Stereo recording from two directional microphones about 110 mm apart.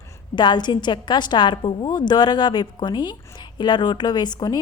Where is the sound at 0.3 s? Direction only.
40° left (ahead or behind).